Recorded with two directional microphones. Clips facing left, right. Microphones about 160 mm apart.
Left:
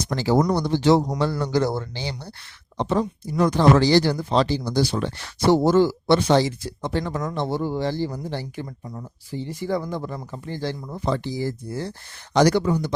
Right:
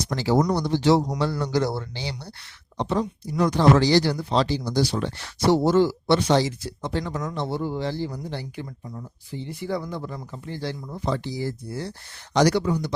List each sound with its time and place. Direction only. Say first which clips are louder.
0.1 s speech: left 2 dB; 50° left (ahead or behind)
7.6 s speech: left 3 dB; 40° left (ahead or behind)
9.5 s speech: left 3 dB; 45° left (ahead or behind)